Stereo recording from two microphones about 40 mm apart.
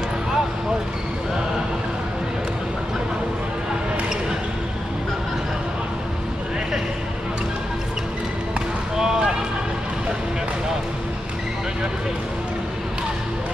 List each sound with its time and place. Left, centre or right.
8.5 s basketball bounce: centre